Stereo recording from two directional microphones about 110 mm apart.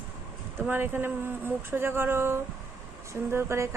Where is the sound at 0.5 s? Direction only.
20° right (ahead or behind).